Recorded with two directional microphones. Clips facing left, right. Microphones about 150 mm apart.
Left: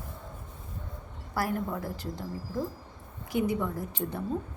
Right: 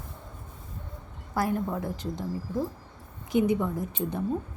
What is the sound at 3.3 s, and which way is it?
Speech, 20° right (ahead or behind).